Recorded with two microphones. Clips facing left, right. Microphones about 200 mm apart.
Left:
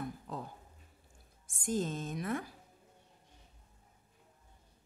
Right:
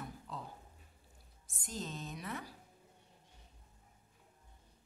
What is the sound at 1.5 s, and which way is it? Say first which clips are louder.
Speech: left 9 dB; 50° left (ahead or behind).